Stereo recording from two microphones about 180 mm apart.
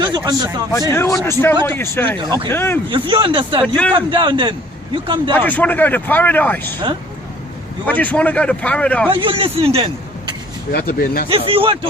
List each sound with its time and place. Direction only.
0.3 s speech: 20° right (ahead or behind)
0.7 s speech: 15° left (ahead or behind)
2.1 s speech: 25° right (ahead or behind)
2.5 s speech: 10° left (ahead or behind)
2.9 s speech: 30° right (ahead or behind)
5.3 s speech: 10° left (ahead or behind)
7.9 s speech: 10° left (ahead or behind)
9.0 s a man's voice: 30° right (ahead or behind)
10.7 s speech: 55° left (ahead or behind)
11.3 s a man's voice: 30° right (ahead or behind)